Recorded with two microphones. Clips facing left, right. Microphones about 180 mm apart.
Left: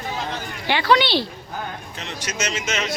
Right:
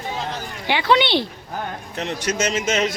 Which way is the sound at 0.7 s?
20° right (ahead or behind).